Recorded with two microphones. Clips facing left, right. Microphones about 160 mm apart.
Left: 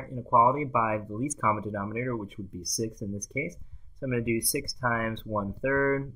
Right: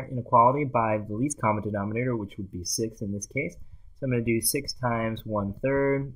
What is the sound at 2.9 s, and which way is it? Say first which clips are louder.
Speech: right 3 dB; 30° right (ahead or behind).